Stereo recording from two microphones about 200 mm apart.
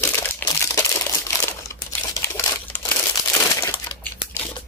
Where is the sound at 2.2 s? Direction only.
10° left (ahead or behind).